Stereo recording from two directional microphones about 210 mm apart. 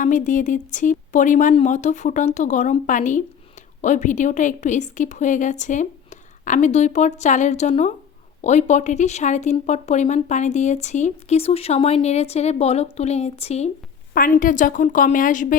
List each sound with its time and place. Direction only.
0.0 s a woman's voice: 40° left (ahead or behind)
14.1 s a woman's voice: 40° left (ahead or behind)